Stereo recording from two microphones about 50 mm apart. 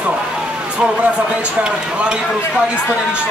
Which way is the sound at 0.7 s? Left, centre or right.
Right.